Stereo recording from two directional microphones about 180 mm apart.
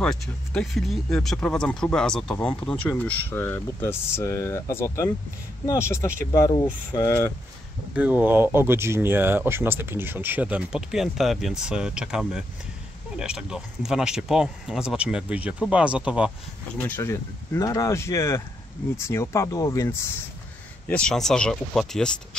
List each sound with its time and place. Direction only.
0.0 s speech: 5° left (ahead or behind)
7.9 s speech: 10° right (ahead or behind)
16.8 s speech: 15° left (ahead or behind)
20.9 s speech: 5° left (ahead or behind)